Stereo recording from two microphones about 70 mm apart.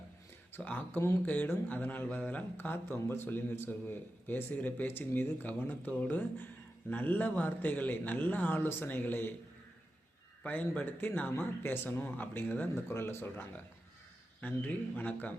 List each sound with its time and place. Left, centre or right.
0.5 s speech: left
10.4 s speech: left